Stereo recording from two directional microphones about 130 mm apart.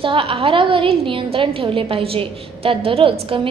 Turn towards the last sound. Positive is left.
turn(degrees=-45)  # may be behind; listen again after turning